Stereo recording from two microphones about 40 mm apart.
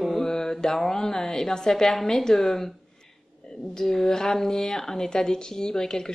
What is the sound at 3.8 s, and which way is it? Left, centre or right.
Speech, centre.